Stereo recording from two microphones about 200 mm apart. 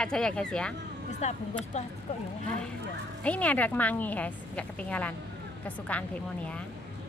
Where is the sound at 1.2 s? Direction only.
35° left (ahead or behind).